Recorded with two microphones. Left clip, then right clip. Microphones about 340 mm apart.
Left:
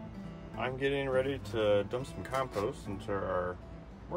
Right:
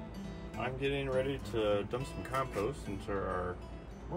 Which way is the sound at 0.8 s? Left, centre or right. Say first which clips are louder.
Left 3 dB; left.